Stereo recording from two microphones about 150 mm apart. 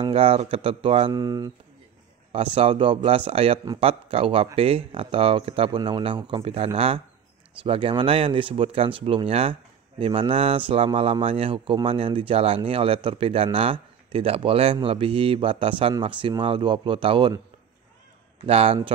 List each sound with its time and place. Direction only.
0.1 s speech: 40° right (ahead or behind)
1.1 s speech: 25° right (ahead or behind)
2.3 s speech: 40° right (ahead or behind)
18.4 s speech: 40° right (ahead or behind)